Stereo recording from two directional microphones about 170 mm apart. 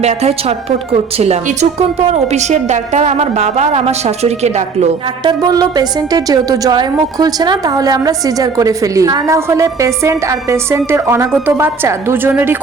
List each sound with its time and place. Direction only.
0.0 s a woman's voice: 40° right (ahead or behind)
2.0 s a woman's voice: 40° right (ahead or behind)
5.2 s a woman's voice: 25° right (ahead or behind)